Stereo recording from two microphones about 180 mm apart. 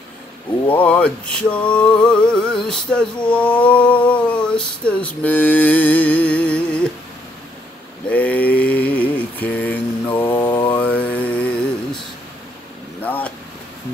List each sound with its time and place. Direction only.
0.7 s a sound: 5° left (ahead or behind)
8.1 s mantra: 10° left (ahead or behind)
10.3 s mantra: 20° left (ahead or behind)
10.7 s mantra: 10° left (ahead or behind)
13.0 s vehicle: 10° left (ahead or behind)